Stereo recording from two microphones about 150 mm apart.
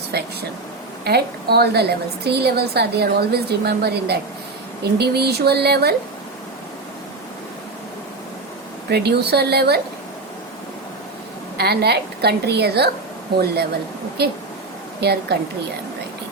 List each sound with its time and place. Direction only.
0.1 s a woman's voice: 90° right
8.9 s a woman's voice: 90° right
11.5 s a woman's voice: 90° right
15.0 s a woman's voice: 90° right